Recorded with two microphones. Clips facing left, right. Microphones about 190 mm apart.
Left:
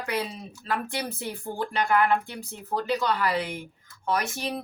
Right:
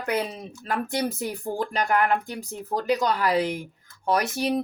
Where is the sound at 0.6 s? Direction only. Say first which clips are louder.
Right 4 dB; 45° right (ahead or behind).